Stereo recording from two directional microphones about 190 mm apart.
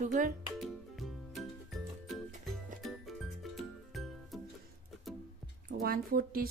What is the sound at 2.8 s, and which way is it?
Music, centre (ahead or behind).